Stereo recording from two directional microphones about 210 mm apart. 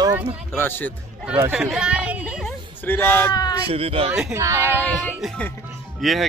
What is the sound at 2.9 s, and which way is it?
Speech, 10° left (ahead or behind).